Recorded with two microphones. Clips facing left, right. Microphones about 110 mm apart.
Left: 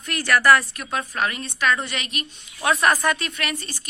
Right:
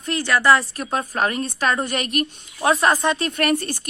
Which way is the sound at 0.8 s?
35° right (ahead or behind).